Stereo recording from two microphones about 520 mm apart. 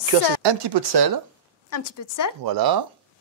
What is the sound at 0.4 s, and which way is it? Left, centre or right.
Speech, right.